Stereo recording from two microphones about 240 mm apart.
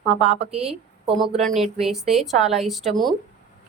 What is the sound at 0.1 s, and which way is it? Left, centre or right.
Speech, right.